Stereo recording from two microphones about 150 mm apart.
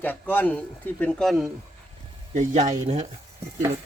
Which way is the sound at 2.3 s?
55° right (ahead or behind).